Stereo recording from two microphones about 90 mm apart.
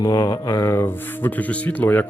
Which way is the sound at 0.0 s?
40° left (ahead or behind).